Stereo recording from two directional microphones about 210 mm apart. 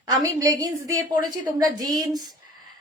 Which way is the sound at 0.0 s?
20° right (ahead or behind).